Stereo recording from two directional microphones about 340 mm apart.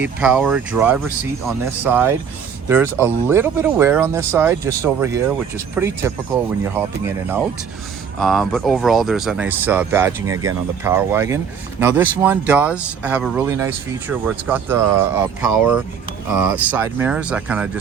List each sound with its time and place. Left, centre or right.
0.0 s speech: centre
16.4 s speech: centre